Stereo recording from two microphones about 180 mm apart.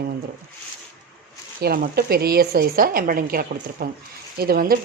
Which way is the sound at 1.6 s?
55° right (ahead or behind).